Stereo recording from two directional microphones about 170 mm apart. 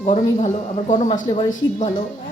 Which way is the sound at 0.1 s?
45° left (ahead or behind).